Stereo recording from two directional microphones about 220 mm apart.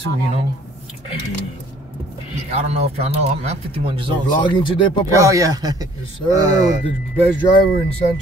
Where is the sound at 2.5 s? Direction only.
30° right (ahead or behind).